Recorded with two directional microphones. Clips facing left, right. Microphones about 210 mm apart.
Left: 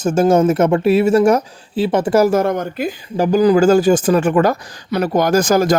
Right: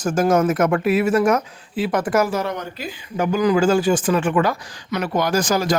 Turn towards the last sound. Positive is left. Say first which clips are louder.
# left 6 dB
turn(degrees=45)  # may be behind; listen again after turning